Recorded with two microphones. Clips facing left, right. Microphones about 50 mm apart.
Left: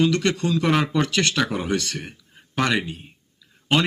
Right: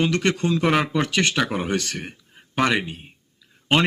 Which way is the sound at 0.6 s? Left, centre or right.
Centre.